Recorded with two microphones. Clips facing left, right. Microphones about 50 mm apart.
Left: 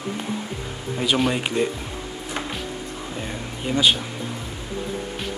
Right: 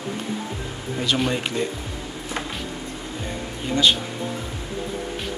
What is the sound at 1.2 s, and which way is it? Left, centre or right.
Speech, centre.